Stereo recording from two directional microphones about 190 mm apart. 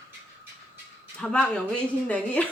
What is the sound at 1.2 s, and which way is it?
Speech, 5° left (ahead or behind).